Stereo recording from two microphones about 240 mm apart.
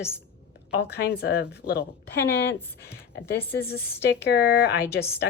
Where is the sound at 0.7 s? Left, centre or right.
Left.